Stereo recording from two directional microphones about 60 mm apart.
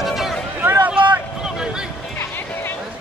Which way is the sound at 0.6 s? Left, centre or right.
Right.